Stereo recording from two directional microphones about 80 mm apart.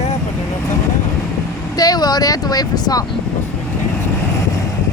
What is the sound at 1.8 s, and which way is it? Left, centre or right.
Speech, left.